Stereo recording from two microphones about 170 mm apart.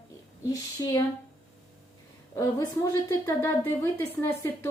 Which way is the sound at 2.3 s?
20° left (ahead or behind).